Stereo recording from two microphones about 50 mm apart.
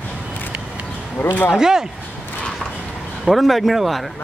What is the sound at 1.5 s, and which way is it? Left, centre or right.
Speech, centre.